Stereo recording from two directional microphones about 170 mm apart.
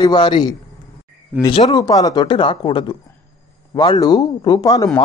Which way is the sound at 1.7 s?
25° left (ahead or behind).